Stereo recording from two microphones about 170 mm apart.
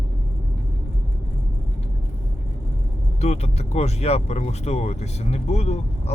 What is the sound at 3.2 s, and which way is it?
Speech, 40° left (ahead or behind).